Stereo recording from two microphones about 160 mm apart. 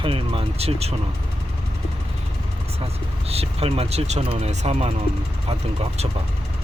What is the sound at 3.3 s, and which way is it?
Speech, 40° right (ahead or behind).